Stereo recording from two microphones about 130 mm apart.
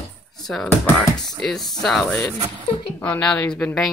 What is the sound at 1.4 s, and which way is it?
Speech, 5° left (ahead or behind).